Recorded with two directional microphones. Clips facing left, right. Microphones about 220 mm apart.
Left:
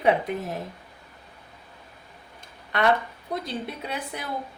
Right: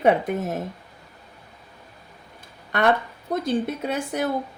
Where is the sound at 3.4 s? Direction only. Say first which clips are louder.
Right 8 dB; 45° right (ahead or behind).